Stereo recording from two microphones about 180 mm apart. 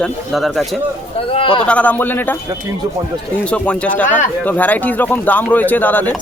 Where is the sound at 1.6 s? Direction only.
5° left (ahead or behind).